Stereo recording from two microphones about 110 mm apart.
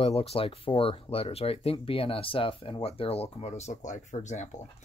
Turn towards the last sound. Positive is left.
turn(degrees=90)